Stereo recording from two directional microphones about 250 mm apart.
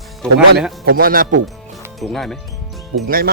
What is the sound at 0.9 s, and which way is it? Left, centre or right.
Speech, right.